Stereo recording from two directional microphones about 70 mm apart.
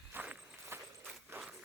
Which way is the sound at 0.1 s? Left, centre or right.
Right.